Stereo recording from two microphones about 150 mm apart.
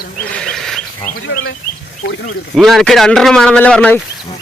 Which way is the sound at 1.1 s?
80° left.